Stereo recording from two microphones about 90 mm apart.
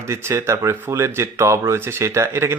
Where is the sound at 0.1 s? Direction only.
30° right (ahead or behind).